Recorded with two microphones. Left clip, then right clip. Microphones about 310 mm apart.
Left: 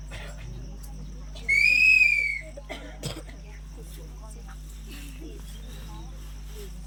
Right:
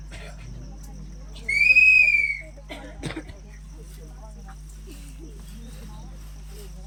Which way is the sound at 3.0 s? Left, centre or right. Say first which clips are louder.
Right 7 dB; left.